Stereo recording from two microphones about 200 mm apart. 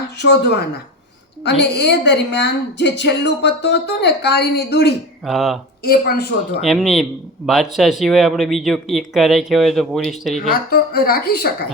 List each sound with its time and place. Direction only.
0.2 s a woman's voice: 60° left (ahead or behind)
5.2 s speech: centre (ahead or behind)
5.8 s speech: 50° left (ahead or behind)
6.6 s speech: centre (ahead or behind)
10.3 s speech: 45° left (ahead or behind)